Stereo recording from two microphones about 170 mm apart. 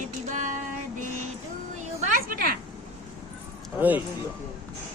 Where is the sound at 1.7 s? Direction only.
45° right (ahead or behind).